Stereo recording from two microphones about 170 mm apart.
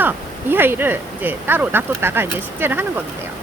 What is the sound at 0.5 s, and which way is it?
Speech, 10° right (ahead or behind).